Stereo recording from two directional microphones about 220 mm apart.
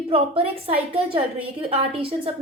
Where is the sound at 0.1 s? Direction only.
25° right (ahead or behind).